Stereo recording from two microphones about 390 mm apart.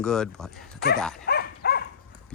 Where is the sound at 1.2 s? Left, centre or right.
Left.